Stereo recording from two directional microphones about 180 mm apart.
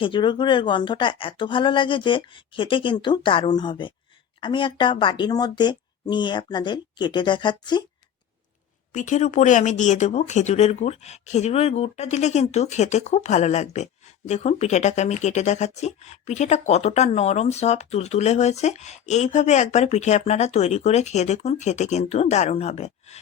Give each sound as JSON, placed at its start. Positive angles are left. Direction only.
{"t": 0.0, "sound": "a woman's voice", "side_deg": 25}
{"t": 8.9, "sound": "speech", "side_deg": 45}